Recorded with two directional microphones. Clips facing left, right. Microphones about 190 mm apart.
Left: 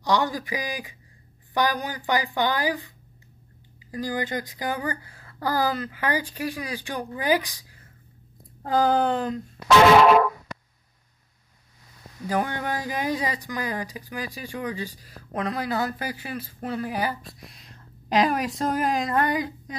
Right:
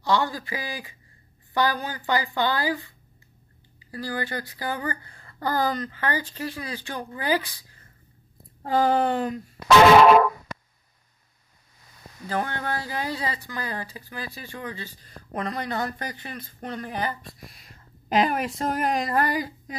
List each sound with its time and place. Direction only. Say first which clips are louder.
0.0 s speech: left 1 dB; 15° left (ahead or behind)
8.6 s speech: even; centre (ahead or behind)
12.3 s speech: left 2 dB; 15° left (ahead or behind)